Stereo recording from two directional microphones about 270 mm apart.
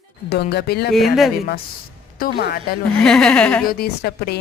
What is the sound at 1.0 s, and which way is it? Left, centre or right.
Speech, centre.